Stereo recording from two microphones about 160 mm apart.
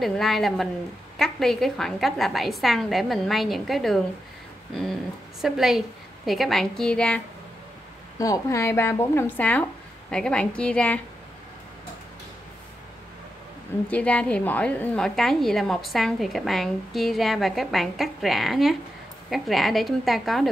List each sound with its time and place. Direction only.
0.0 s a woman's voice: centre (ahead or behind)
5.4 s a woman's voice: centre (ahead or behind)
8.2 s a woman's voice: 20° left (ahead or behind)
13.8 s a woman's voice: 10° left (ahead or behind)